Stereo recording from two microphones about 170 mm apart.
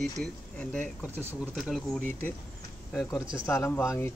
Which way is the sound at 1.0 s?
10° right (ahead or behind).